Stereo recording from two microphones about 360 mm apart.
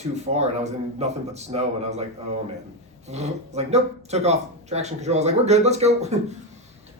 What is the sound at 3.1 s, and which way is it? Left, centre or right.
Speech, centre.